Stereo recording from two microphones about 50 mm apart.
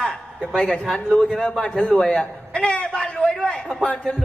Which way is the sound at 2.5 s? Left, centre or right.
Left.